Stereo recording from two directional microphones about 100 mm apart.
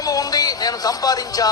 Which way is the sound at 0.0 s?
40° left (ahead or behind).